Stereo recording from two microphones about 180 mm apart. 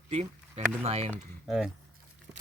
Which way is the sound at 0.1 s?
35° right (ahead or behind).